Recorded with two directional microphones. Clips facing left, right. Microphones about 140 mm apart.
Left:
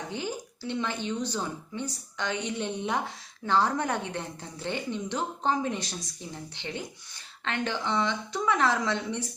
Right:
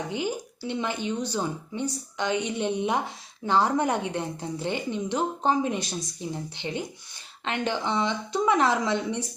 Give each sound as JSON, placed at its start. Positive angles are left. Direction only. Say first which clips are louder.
{"t": 0.1, "sound": "speech", "louder": "right 4 dB", "side_deg": -15}